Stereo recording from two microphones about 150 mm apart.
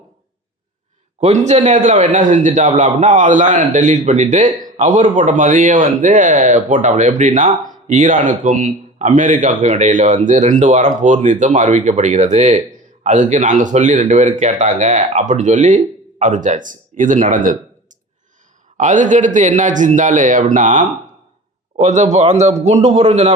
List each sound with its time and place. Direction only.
1.2 s a man's voice: 45° right (ahead or behind)
18.8 s a man's voice: 55° right (ahead or behind)